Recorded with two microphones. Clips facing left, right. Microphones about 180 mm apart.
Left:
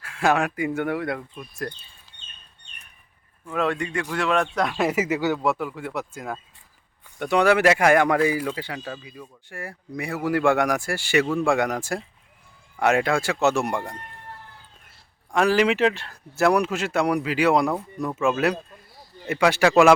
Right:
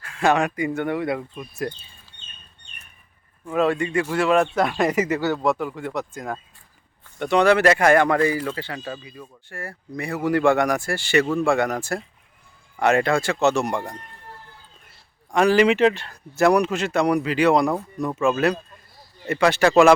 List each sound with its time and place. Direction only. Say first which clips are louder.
0.0 s a man's voice: right 2 dB; 5° left (ahead or behind)
3.4 s a man's voice: right 4 dB; 5° right (ahead or behind)
15.3 s a man's voice: right 3 dB; centre (ahead or behind)
17.7 s a man's voice: right 2 dB; 5° right (ahead or behind)
18.2 s speech: right 2 dB; 5° left (ahead or behind)